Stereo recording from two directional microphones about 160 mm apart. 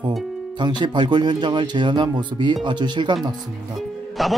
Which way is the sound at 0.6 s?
30° right (ahead or behind).